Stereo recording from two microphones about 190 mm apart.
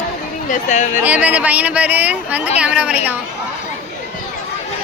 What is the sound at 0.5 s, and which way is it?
Speech, 40° left (ahead or behind).